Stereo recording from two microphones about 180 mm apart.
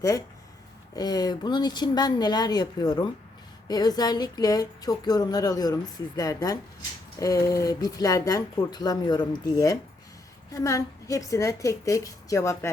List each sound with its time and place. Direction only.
0.9 s a woman's voice: 20° left (ahead or behind)